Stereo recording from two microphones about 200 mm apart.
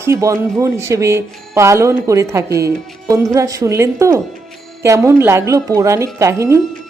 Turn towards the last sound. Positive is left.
turn(degrees=-15)  # may be behind; listen again after turning